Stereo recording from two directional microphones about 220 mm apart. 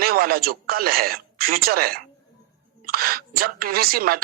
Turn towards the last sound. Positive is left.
turn(degrees=-40)  # may be behind; listen again after turning